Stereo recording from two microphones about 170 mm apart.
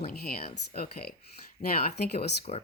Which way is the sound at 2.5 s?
45° left (ahead or behind).